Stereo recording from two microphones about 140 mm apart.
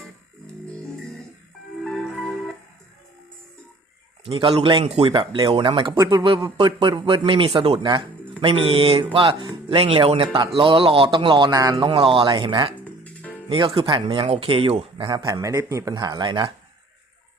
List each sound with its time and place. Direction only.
1.8 s music: 5° left (ahead or behind)
4.3 s speech: 40° right (ahead or behind)
5.9 s speech: 25° right (ahead or behind)